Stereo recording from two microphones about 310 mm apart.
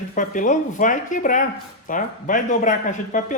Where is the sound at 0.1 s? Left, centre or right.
Left.